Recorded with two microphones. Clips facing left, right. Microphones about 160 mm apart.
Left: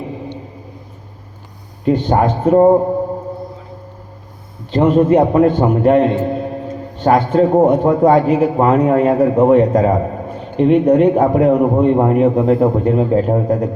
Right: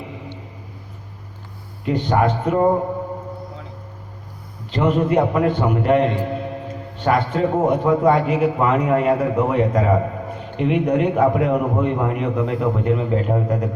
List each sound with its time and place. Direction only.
1.8 s a man's voice: 35° left (ahead or behind)
4.7 s a man's voice: 30° left (ahead or behind)
6.1 s music: 35° left (ahead or behind)
7.3 s a man's voice: 30° left (ahead or behind)